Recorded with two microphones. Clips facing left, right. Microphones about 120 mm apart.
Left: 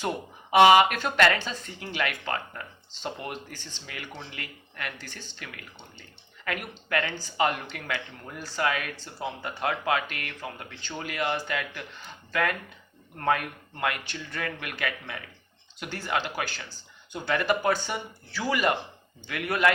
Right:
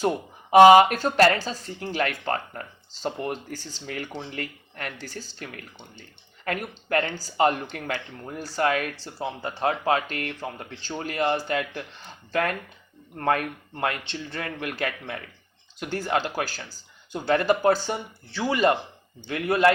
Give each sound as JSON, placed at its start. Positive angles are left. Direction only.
{"t": 0.5, "sound": "speech", "side_deg": -40}
{"t": 9.1, "sound": "speech", "side_deg": -30}
{"t": 13.7, "sound": "speech", "side_deg": -30}